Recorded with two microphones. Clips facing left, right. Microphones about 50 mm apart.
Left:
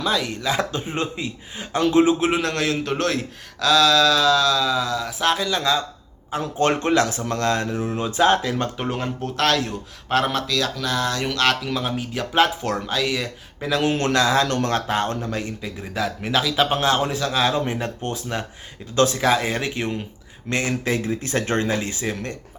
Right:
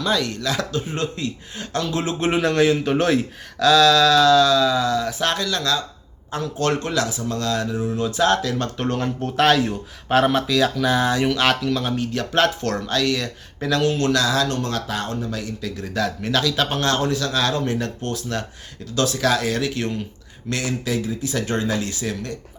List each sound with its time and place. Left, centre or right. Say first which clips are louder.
0.0 s a man's voice: right 1 dB; centre
0.5 s a man's voice: left 1 dB; left
1.8 s speech: left 9 dB; left
2.3 s a man's voice: right 4 dB; centre
5.5 s a man's voice: left 1 dB; centre
6.4 s speech: left 2 dB; left
8.8 s a man's voice: right 2 dB; centre
9.3 s speech: right 4 dB; centre
11.3 s a man's voice: left 2 dB; centre
11.6 s a man's voice: right 3 dB; centre
13.9 s speech: left 1 dB; left
14.4 s speech: left 2 dB; left
15.8 s a man's voice: right 1 dB; centre; by 22.4 s left